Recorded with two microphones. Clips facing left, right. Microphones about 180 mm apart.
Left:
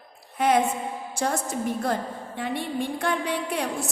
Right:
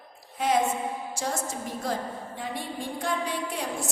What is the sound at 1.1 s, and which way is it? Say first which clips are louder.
A woman's voice: left 9 dB; 60° left (ahead or behind).